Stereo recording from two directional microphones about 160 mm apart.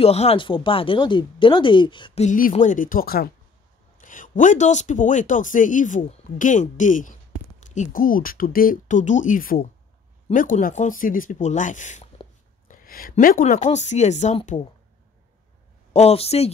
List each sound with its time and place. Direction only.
0.0 s speech: 40° left (ahead or behind)
2.2 s speech: 60° left (ahead or behind)
4.0 s speech: 55° left (ahead or behind)
12.6 s a sound: 65° left (ahead or behind)
13.1 s speech: 55° left (ahead or behind)
13.6 s speech: 45° left (ahead or behind)
15.9 s speech: 40° left (ahead or behind)